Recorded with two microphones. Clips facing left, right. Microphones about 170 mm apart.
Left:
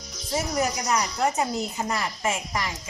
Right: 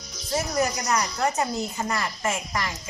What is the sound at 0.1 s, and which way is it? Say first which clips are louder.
Music: even; 5° left (ahead or behind).